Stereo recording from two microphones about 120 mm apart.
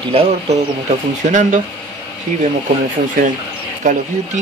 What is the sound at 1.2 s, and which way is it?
Speech, 90° right.